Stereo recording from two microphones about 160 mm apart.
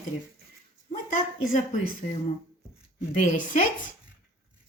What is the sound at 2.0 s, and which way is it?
A woman's voice, 45° left (ahead or behind).